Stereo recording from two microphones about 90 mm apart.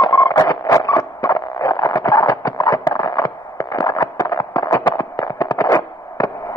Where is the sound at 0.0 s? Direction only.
55° left (ahead or behind).